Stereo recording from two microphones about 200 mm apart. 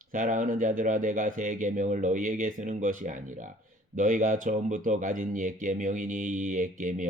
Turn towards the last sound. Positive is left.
turn(degrees=-40)  # may be behind; listen again after turning